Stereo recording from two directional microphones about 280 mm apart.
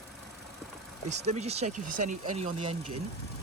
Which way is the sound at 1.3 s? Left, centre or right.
Right.